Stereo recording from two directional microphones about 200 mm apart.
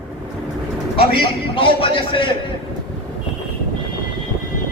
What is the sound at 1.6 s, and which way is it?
Speech, 25° left (ahead or behind).